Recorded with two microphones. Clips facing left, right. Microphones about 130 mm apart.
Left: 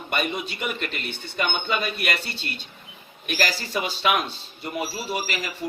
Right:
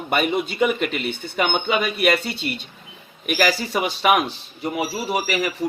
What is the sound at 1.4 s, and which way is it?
Speech, 70° right (ahead or behind).